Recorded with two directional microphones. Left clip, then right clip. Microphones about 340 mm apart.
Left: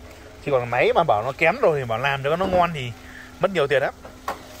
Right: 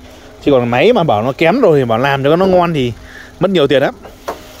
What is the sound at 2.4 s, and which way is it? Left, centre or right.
Speech, centre.